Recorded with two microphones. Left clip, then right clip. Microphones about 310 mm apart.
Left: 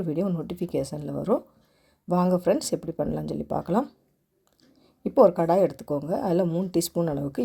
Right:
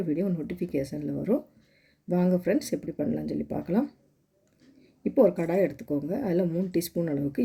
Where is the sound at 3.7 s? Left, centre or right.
Left.